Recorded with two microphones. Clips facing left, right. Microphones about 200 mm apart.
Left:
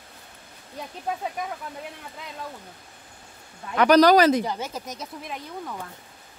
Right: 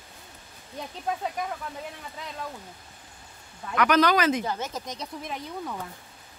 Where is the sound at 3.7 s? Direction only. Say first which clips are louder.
Left 6 dB; 35° left (ahead or behind).